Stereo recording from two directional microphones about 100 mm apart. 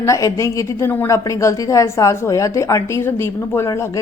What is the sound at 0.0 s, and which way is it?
A woman's voice, 30° left (ahead or behind).